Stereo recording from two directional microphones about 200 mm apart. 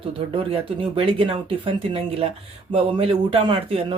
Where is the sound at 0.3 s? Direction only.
30° right (ahead or behind).